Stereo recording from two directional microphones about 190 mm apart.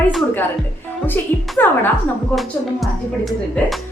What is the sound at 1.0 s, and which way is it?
Speech, 10° left (ahead or behind).